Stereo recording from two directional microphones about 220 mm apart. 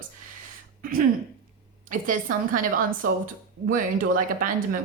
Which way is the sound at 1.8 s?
35° right (ahead or behind).